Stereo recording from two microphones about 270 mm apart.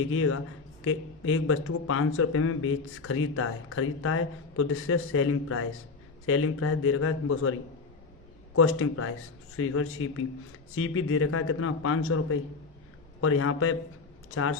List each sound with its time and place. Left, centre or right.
0.0 s speech: left
8.5 s speech: left